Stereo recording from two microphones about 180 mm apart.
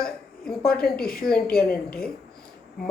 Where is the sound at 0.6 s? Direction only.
55° left (ahead or behind).